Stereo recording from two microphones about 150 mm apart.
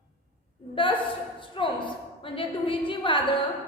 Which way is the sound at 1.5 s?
35° left (ahead or behind).